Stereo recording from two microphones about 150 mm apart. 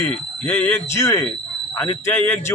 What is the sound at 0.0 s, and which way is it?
Speech, 15° left (ahead or behind).